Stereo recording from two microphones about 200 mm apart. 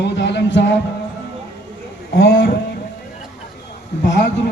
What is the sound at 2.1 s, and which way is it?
Speech, 50° left (ahead or behind).